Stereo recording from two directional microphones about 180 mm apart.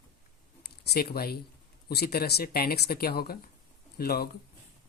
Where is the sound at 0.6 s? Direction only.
60° left (ahead or behind).